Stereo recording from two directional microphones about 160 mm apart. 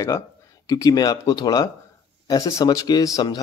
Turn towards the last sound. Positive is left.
turn(degrees=25)  # may be behind; listen again after turning